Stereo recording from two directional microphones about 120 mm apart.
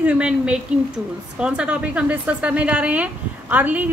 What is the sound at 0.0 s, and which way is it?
Speech, 10° right (ahead or behind).